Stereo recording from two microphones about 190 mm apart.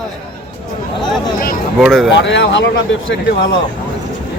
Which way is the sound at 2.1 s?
70° left (ahead or behind).